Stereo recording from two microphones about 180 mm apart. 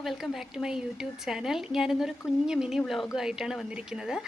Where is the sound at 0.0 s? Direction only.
Centre (ahead or behind).